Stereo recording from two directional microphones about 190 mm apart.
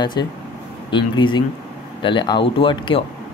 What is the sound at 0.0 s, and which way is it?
Speech, 20° left (ahead or behind).